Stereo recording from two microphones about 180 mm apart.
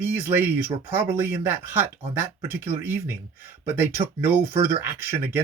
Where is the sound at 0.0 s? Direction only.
10° right (ahead or behind).